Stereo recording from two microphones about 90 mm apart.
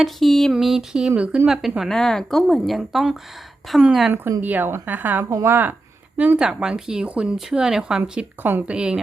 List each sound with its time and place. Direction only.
0.0 s speech: centre (ahead or behind)
4.1 s a woman's voice: 25° right (ahead or behind)
8.7 s speech: 10° right (ahead or behind)